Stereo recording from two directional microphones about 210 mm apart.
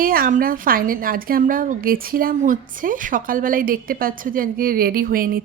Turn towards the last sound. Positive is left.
turn(degrees=-45)  # may be behind; listen again after turning